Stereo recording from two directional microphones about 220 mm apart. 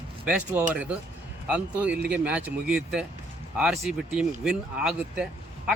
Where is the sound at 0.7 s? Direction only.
5° right (ahead or behind).